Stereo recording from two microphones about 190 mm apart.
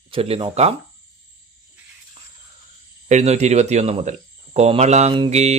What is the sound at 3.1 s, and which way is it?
Speech, 35° right (ahead or behind).